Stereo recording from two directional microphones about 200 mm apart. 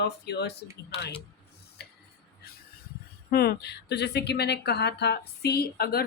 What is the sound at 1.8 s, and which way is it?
Tick-tock, 55° left (ahead or behind).